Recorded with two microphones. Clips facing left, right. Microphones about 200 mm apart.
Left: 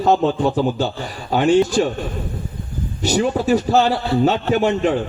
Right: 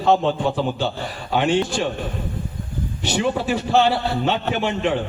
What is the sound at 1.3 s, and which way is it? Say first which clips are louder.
Speech: left 5 dB; 40° left (ahead or behind).